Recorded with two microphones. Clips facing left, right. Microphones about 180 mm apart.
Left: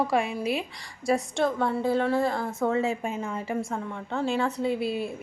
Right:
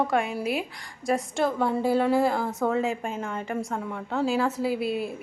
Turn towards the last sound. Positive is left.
turn(degrees=0)  # may be behind; listen again after turning